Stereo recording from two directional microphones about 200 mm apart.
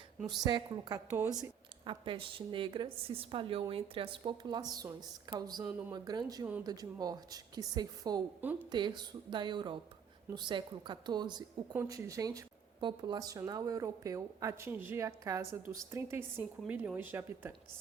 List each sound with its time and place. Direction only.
0.2 s a woman's voice: centre (ahead or behind)
0.4 s a woman's voice: 20° right (ahead or behind)